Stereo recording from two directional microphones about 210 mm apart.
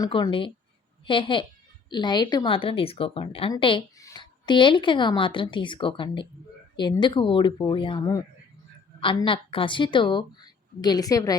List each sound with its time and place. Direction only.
0.0 s a woman's voice: 20° left (ahead or behind)